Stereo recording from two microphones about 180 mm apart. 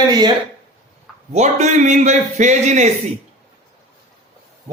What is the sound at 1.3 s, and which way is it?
A man's voice, 40° right (ahead or behind).